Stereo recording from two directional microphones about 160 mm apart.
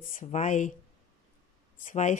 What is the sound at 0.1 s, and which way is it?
Speech, 55° left (ahead or behind).